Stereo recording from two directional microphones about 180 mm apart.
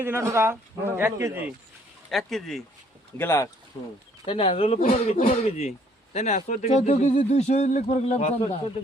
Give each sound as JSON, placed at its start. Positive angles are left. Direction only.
{"t": 0.0, "sound": "speech", "side_deg": -15}
{"t": 2.0, "sound": "speech", "side_deg": 0}
{"t": 3.2, "sound": "speech", "side_deg": 15}
{"t": 4.3, "sound": "speech", "side_deg": 30}